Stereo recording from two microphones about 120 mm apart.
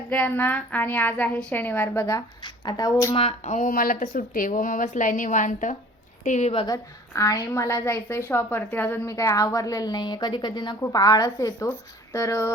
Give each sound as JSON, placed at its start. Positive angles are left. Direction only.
{"t": 0.1, "sound": "a woman's voice", "side_deg": 15}
{"t": 2.4, "sound": "speech", "side_deg": 35}
{"t": 3.2, "sound": "speech", "side_deg": 60}
{"t": 6.7, "sound": "a woman's voice", "side_deg": 25}